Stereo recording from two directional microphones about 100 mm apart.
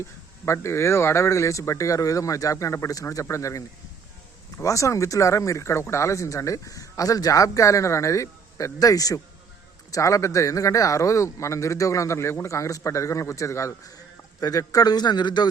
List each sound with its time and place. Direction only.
0.4 s a man's voice: 25° left (ahead or behind); by 15.4 s 45° left (ahead or behind)